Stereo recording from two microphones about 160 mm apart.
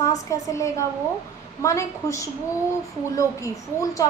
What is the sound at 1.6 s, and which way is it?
Speech, 20° left (ahead or behind).